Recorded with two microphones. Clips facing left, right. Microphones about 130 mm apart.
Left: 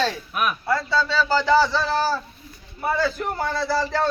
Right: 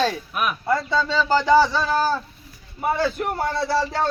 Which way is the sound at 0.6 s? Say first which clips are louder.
Right 2 dB; 20° right (ahead or behind).